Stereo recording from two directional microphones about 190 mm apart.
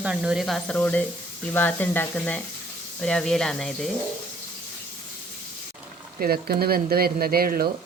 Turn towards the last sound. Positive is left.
turn(degrees=-50)  # may be behind; listen again after turning